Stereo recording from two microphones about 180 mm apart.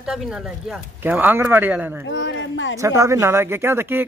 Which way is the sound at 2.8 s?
15° right (ahead or behind).